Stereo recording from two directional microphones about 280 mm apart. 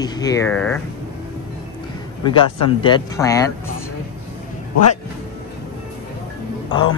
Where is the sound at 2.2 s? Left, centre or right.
Centre.